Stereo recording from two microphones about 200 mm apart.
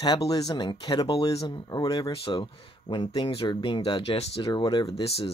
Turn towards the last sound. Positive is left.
turn(degrees=30)  # may be behind; listen again after turning